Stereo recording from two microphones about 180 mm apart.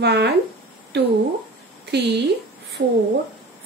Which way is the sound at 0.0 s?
70° right (ahead or behind).